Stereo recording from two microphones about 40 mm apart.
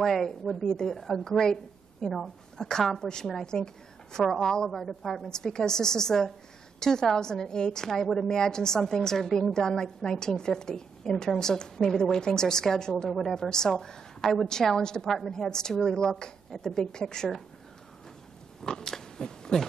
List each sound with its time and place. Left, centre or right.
0.0 s a woman's voice: centre
18.6 s speech: centre